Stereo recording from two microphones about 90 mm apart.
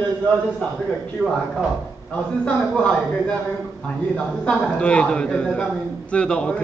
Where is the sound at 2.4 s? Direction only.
10° left (ahead or behind).